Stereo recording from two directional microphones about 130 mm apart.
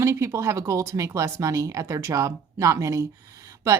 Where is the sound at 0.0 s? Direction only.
20° right (ahead or behind).